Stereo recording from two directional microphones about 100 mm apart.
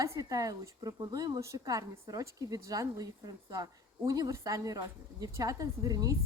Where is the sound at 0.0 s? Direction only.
35° right (ahead or behind).